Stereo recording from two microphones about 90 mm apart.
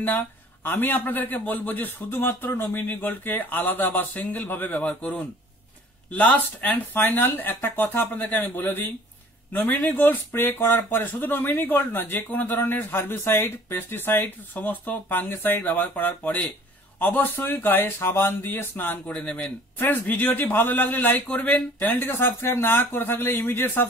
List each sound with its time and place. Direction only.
0.7 s speech: 20° left (ahead or behind)